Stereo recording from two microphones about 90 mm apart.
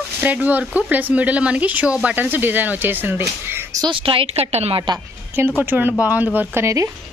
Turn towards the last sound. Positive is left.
turn(degrees=-35)  # may be behind; listen again after turning